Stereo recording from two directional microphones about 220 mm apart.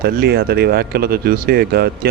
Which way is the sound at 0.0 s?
45° right (ahead or behind).